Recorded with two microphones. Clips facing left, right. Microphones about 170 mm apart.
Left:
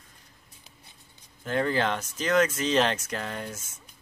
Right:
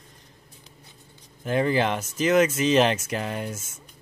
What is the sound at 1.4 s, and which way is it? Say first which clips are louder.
Speech: right 3 dB; 10° right (ahead or behind).